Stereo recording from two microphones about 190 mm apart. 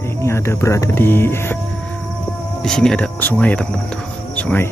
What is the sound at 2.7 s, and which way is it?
Speech, 5° left (ahead or behind).